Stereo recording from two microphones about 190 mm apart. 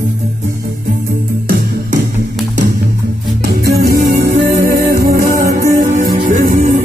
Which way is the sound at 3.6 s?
55° right (ahead or behind).